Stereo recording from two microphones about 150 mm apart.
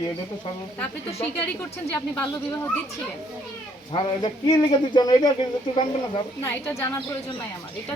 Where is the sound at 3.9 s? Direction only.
30° left (ahead or behind).